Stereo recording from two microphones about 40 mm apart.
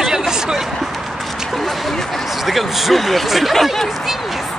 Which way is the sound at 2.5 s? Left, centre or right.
Centre.